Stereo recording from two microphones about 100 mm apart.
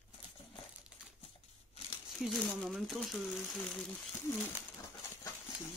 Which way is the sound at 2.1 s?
Centre (ahead or behind).